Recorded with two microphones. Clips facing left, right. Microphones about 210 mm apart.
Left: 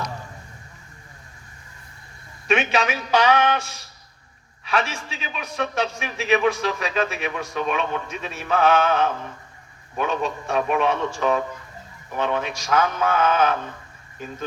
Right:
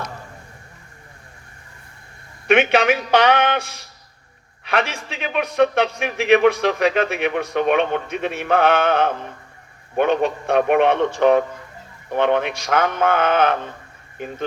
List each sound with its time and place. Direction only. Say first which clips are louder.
2.5 s a man's voice: right 6 dB; 55° right (ahead or behind)